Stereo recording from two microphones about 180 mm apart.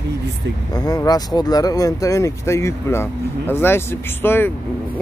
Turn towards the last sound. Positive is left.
turn(degrees=10)  # may be behind; listen again after turning